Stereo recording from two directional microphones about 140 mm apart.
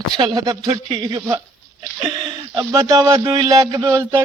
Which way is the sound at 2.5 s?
25° right (ahead or behind).